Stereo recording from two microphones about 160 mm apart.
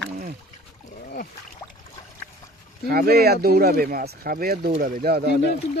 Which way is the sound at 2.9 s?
70° right (ahead or behind).